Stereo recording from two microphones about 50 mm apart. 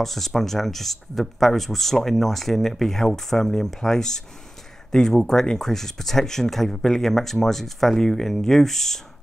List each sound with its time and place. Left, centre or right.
0.0 s speech: centre